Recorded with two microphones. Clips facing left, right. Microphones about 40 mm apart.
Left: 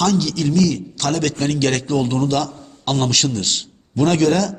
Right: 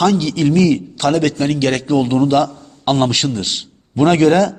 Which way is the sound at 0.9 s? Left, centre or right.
Centre.